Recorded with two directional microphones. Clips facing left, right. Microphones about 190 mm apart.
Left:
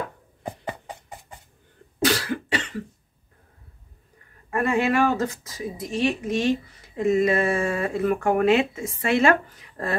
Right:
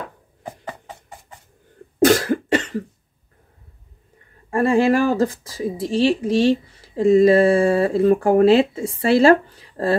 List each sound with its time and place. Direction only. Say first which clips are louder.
2.0 s cough: right 9 dB; 45° right (ahead or behind)
4.5 s speech: right 6 dB; 30° right (ahead or behind)